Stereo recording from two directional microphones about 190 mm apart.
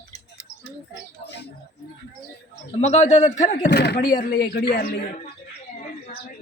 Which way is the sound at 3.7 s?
60° left (ahead or behind).